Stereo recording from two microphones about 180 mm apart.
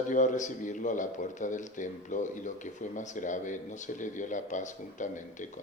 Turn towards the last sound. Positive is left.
turn(degrees=45)  # may be behind; listen again after turning